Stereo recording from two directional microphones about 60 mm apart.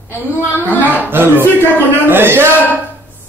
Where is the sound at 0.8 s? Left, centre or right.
Right.